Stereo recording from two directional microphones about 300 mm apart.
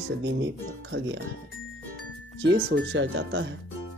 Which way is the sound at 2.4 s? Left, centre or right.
Right.